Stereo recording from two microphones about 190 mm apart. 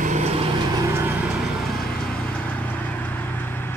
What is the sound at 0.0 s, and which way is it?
Vehicle, 35° right (ahead or behind).